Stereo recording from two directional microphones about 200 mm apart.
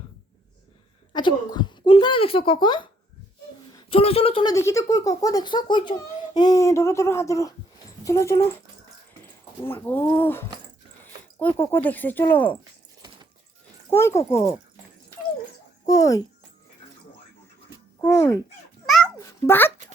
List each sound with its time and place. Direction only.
1.1 s speech: 20° left (ahead or behind)
3.8 s speech: 30° left (ahead or behind)
4.5 s a child's voice: 15° left (ahead or behind)
9.6 s a child's voice: 10° left (ahead or behind)
13.9 s a child's voice: 15° left (ahead or behind)
15.9 s a child's voice: 15° left (ahead or behind)
18.0 s a child's voice: 10° left (ahead or behind)
19.1 s a sound: 10° left (ahead or behind)